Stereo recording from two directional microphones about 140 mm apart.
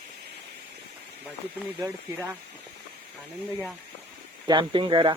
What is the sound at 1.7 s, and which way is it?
Speech, 25° right (ahead or behind).